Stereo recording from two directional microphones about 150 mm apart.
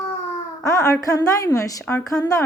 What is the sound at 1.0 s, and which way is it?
A woman's voice, 25° left (ahead or behind).